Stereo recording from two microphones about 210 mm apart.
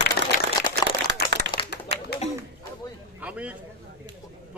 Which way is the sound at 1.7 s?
50° left (ahead or behind).